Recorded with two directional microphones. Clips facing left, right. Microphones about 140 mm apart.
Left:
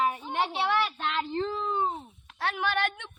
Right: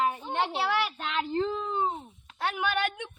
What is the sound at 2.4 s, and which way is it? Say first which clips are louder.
Speech: even; 15° right (ahead or behind).